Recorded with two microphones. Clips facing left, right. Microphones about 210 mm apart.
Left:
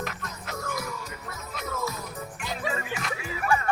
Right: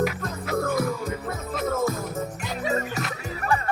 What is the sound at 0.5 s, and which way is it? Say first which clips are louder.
Music: right 10 dB; 55° right (ahead or behind).